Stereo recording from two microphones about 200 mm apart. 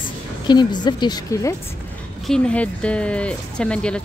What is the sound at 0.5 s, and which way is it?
A woman's voice, 20° left (ahead or behind).